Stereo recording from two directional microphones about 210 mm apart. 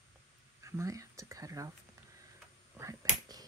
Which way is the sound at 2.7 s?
15° right (ahead or behind).